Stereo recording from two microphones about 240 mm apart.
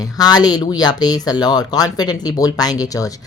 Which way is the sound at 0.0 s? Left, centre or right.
Centre.